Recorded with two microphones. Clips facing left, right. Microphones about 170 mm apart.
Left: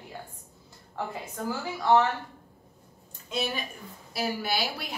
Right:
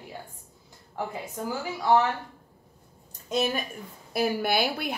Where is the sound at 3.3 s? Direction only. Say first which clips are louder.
Right 5 dB; 45° right (ahead or behind).